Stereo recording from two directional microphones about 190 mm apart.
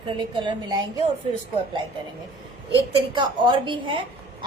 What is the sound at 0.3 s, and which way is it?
Speech, 25° right (ahead or behind).